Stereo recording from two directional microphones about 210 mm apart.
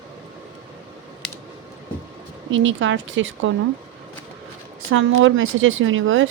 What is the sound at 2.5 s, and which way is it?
Speech, 65° right (ahead or behind).